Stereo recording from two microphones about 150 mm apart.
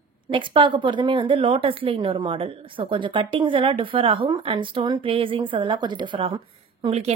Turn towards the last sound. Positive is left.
turn(degrees=-40)  # may be behind; listen again after turning